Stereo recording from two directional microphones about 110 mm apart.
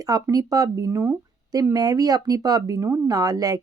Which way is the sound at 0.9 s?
20° right (ahead or behind).